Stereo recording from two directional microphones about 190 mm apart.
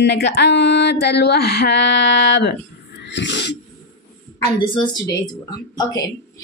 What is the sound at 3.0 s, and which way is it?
Wheeze, 70° left (ahead or behind).